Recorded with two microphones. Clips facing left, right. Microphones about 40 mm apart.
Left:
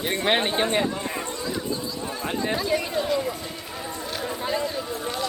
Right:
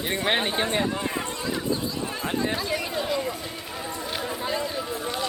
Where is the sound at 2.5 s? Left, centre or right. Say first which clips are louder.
Left 3 dB; centre.